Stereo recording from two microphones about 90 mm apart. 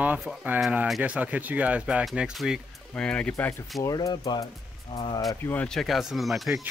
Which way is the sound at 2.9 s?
10° left (ahead or behind).